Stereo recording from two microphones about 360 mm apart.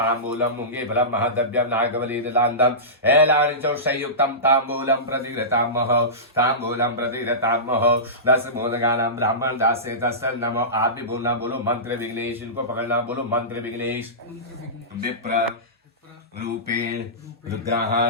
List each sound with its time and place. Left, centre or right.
0.0 s a man's voice: centre
16.4 s speech: right